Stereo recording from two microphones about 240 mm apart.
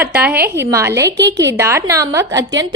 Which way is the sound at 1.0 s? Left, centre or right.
Right.